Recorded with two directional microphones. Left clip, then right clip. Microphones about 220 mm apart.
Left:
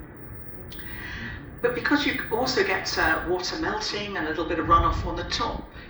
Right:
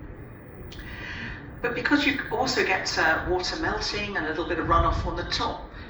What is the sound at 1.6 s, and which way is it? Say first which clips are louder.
A woman's voice: even; 45° left (ahead or behind).